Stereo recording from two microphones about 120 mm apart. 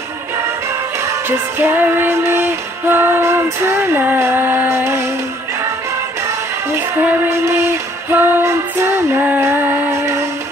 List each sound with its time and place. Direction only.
1.6 s female singing: 20° right (ahead or behind)
7.0 s female singing: 15° right (ahead or behind)
9.4 s a sound: 25° right (ahead or behind)